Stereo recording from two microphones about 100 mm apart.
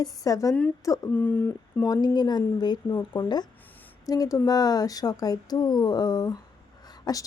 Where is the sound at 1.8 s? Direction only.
40° left (ahead or behind).